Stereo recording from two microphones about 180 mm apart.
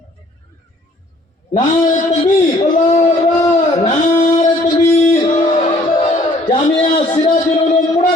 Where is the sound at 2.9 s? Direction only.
40° left (ahead or behind).